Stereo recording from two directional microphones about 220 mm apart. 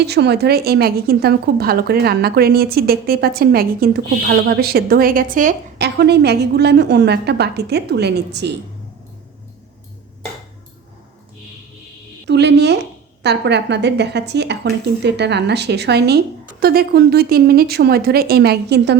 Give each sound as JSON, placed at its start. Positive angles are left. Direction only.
{"t": 0.0, "sound": "a woman's voice", "side_deg": -50}
{"t": 12.3, "sound": "a woman's voice", "side_deg": -50}